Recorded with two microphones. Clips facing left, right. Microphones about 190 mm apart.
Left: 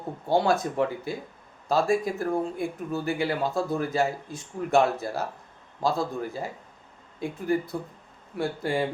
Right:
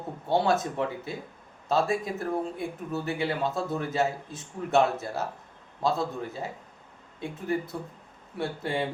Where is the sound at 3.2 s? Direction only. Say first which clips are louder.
Left 1 dB; centre (ahead or behind).